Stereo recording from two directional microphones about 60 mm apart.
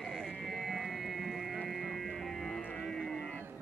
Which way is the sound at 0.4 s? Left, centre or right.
Centre.